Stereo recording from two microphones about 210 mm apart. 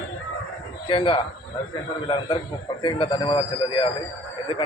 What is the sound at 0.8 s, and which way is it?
A man's voice, 25° left (ahead or behind).